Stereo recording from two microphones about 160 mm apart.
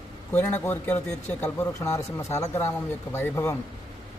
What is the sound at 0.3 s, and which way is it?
A man's voice, 10° left (ahead or behind).